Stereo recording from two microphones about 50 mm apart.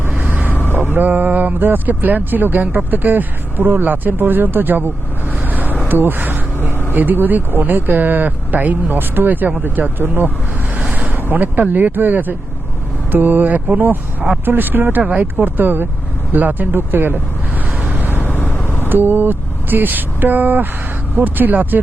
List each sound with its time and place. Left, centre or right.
0.1 s vehicle: right
0.5 s vehicle: left
0.8 s speech: right
5.3 s vehicle: right
5.9 s speech: right
11.1 s vehicle: right
11.7 s speech: right
17.7 s vehicle: right
18.2 s vehicle: left
18.9 s speech: right